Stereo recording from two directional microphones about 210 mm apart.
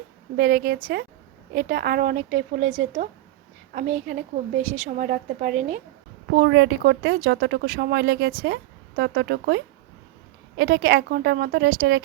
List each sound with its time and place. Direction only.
0.3 s a woman's voice: 45° right (ahead or behind)
6.3 s a woman's voice: 55° right (ahead or behind)
10.6 s speech: 50° right (ahead or behind)